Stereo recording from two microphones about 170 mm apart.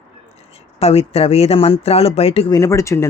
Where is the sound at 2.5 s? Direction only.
20° left (ahead or behind).